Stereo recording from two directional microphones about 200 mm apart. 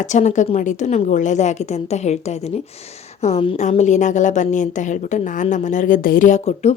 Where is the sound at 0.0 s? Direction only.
35° left (ahead or behind).